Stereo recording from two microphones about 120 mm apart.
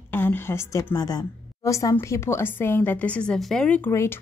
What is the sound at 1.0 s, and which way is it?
A woman's voice, 35° left (ahead or behind).